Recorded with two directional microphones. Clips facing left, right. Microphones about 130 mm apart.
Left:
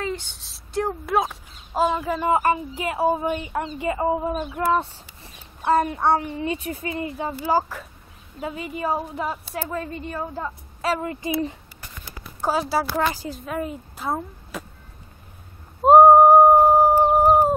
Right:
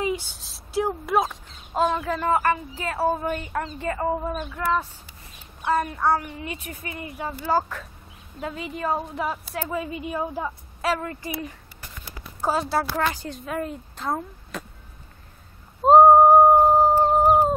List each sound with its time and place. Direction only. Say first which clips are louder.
0.0 s speech: right 2 dB; 10° right (ahead or behind); by 2.3 s 10° left (ahead or behind)
2.3 s speech: left 2 dB; 20° left (ahead or behind)
4.6 s speech: left 3 dB; 25° left (ahead or behind)
7.2 s a woman's voice: left 1 dB; 10° left (ahead or behind); by 11.0 s 5° right (ahead or behind)
11.0 s speech: left 4 dB; 15° left (ahead or behind)
12.4 s a woman's voice: left 1 dB; centre (ahead or behind)
15.8 s a sound: left 2 dB; 10° left (ahead or behind)